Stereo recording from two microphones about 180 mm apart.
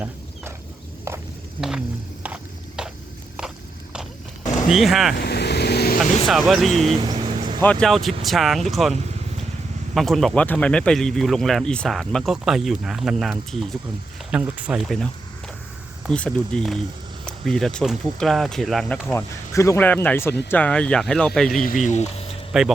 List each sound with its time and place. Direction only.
2.2 s a sound: 5° right (ahead or behind)
4.7 s speech: centre (ahead or behind)
5.1 s vehicle: 65° left (ahead or behind)
6.0 s speech: centre (ahead or behind)
7.0 s vehicle: 25° right (ahead or behind)
7.6 s speech: 5° left (ahead or behind)
19.1 s speech: 15° left (ahead or behind)
21.6 s speech: 45° left (ahead or behind)